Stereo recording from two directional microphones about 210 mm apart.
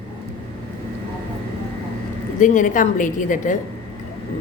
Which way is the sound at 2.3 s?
40° left (ahead or behind).